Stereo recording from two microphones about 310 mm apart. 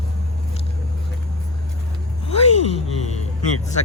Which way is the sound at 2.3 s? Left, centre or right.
Centre.